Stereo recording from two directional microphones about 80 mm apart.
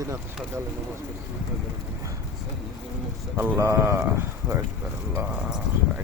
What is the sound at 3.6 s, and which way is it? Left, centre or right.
Speech, right.